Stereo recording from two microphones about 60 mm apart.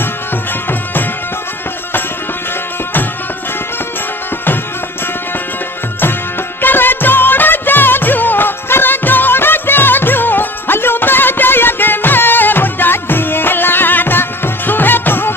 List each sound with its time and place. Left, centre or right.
6.6 s music: left